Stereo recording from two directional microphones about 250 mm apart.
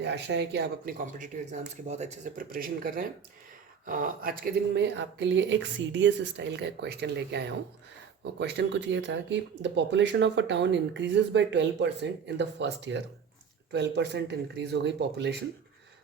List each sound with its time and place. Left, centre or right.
0.0 s speech: right